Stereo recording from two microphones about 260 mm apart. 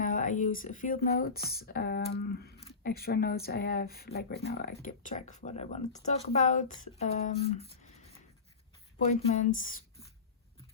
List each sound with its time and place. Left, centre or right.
0.0 s speech: left
9.0 s speech: left